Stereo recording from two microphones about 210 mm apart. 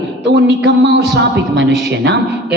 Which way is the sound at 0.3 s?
55° right (ahead or behind).